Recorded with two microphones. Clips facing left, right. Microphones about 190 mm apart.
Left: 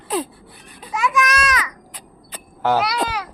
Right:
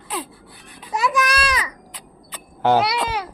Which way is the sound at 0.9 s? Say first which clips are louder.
Left 1 dB; 35° right (ahead or behind).